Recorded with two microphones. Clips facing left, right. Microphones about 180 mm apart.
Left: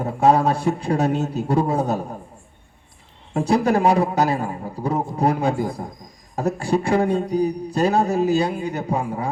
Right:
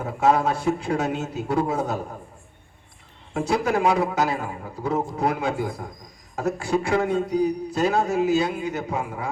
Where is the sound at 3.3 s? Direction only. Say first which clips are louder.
Left 4 dB; 35° left (ahead or behind).